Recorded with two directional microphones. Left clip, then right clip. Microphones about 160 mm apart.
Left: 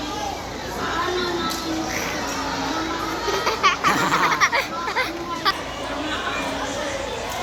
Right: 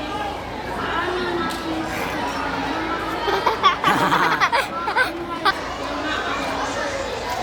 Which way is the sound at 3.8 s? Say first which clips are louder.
Right 1 dB; 90° right.